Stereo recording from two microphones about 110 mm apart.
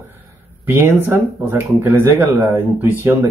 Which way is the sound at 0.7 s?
20° right (ahead or behind).